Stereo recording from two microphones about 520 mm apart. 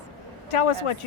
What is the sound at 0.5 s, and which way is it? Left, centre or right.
Speech, left.